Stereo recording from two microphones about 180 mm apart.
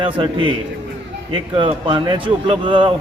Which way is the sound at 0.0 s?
30° right (ahead or behind).